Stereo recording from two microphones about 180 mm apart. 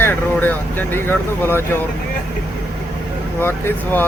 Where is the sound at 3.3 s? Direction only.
10° left (ahead or behind).